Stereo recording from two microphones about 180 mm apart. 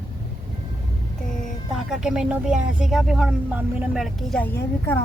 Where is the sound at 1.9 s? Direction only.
5° right (ahead or behind).